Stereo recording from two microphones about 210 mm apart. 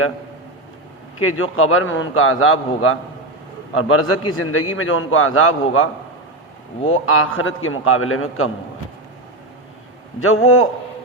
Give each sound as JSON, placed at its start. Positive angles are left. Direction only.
{"t": 1.2, "sound": "a man's voice", "side_deg": 80}
{"t": 6.9, "sound": "a man's voice", "side_deg": 85}
{"t": 10.2, "sound": "a man's voice", "side_deg": 85}